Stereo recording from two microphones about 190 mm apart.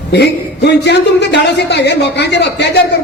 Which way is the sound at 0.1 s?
60° left (ahead or behind).